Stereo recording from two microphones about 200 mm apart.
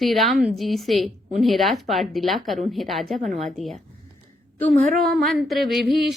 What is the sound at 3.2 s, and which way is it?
Speech, 35° right (ahead or behind).